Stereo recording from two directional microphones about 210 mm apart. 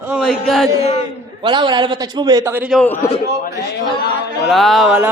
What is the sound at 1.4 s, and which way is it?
A man's voice, 20° right (ahead or behind).